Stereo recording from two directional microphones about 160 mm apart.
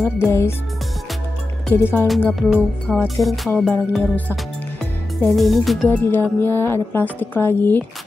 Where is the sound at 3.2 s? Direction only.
Centre (ahead or behind).